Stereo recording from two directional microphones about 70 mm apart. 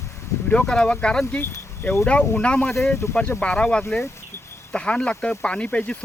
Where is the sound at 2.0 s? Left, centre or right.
Centre.